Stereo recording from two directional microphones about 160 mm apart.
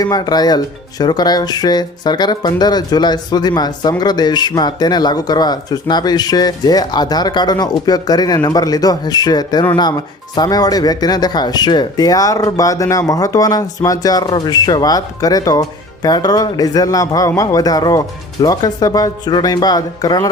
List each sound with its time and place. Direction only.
0.0 s speech: 25° left (ahead or behind)